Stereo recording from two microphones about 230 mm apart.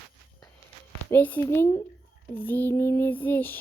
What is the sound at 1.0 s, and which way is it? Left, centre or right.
Speech, centre.